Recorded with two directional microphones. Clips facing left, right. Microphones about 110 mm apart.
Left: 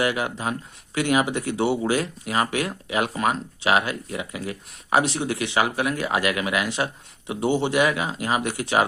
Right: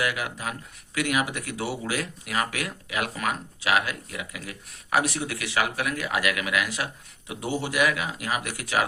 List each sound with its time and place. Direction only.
0.0 s speech: 30° left (ahead or behind)